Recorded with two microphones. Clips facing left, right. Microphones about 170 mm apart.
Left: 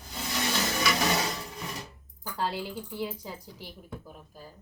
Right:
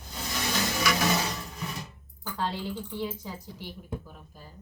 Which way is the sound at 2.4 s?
10° left (ahead or behind).